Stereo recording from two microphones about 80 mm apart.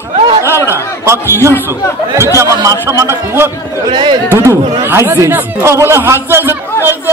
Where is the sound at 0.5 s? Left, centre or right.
Left.